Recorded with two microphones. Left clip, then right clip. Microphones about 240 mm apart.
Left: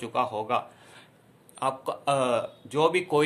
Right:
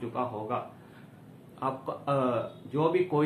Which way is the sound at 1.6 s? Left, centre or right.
Left.